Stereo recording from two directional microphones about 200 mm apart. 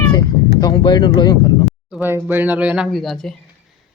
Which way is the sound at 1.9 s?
10° right (ahead or behind).